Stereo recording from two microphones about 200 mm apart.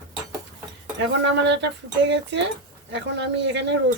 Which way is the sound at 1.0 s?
60° right (ahead or behind).